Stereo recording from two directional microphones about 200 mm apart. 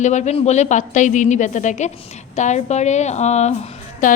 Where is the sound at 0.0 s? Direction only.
35° left (ahead or behind).